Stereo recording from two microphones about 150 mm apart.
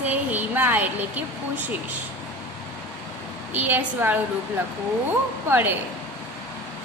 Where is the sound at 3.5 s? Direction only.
10° right (ahead or behind).